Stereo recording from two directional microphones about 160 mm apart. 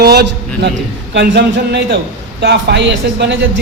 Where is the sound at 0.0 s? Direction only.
90° right.